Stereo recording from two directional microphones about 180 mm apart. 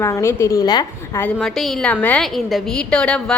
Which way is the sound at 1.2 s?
5° left (ahead or behind).